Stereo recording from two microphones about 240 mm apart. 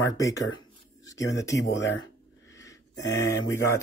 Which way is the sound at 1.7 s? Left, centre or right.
Left.